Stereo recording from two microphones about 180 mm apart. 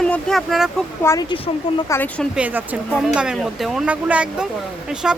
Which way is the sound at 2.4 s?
10° right (ahead or behind).